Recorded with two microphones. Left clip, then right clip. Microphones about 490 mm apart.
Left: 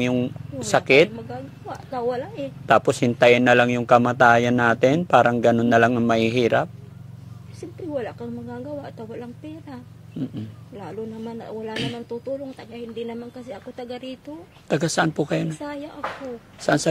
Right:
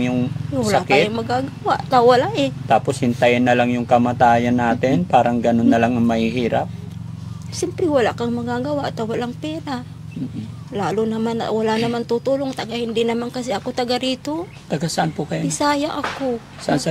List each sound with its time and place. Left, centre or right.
0.0 s speech: left
1.3 s speech: right
2.7 s speech: left
7.9 s speech: right
14.7 s speech: left
15.6 s speech: right
16.7 s speech: left